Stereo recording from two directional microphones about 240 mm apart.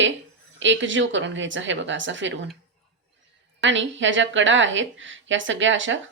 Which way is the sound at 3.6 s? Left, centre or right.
Right.